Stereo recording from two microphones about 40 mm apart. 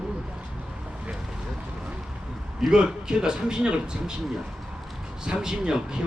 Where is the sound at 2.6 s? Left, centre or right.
Centre.